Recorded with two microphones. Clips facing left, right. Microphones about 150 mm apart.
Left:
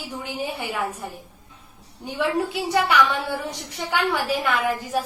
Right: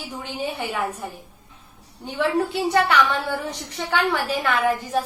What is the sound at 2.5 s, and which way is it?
A woman's voice, 10° left (ahead or behind).